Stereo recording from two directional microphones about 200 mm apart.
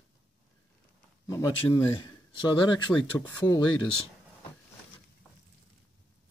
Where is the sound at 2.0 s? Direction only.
25° left (ahead or behind).